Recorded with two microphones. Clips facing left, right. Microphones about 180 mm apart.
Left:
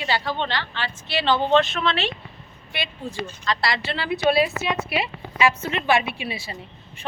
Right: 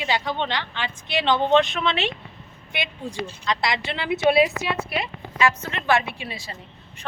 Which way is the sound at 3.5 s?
15° right (ahead or behind).